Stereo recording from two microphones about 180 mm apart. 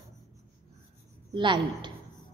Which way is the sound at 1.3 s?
25° right (ahead or behind).